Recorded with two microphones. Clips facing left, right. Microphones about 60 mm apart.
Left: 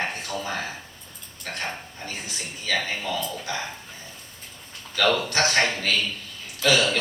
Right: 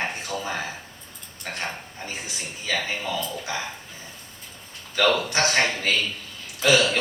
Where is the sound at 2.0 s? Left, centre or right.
Right.